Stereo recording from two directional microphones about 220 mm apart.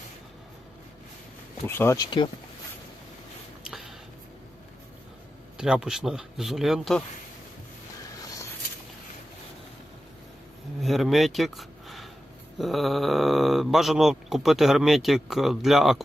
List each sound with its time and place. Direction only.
1.6 s speech: 10° left (ahead or behind)
3.6 s a sound: centre (ahead or behind)
5.5 s speech: 5° right (ahead or behind)
10.8 s speech: centre (ahead or behind)